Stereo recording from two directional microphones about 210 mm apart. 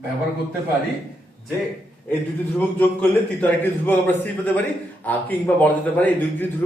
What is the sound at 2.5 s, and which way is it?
A man's voice, 5° left (ahead or behind).